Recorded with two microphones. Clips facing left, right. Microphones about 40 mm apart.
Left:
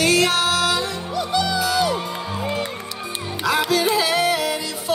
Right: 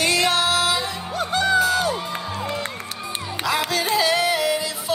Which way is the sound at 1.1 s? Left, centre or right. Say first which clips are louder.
Right 2 dB; right.